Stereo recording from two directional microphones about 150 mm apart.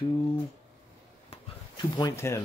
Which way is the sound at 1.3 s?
30° left (ahead or behind).